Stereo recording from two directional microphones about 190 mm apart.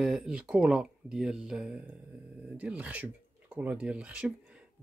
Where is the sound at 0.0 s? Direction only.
5° right (ahead or behind).